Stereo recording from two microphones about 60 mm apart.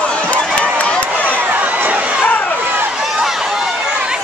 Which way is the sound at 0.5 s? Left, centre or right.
Left.